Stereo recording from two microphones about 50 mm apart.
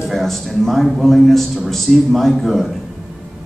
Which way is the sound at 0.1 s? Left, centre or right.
Centre.